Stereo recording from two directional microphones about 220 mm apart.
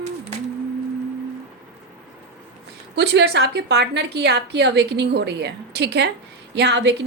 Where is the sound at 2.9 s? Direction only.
50° right (ahead or behind).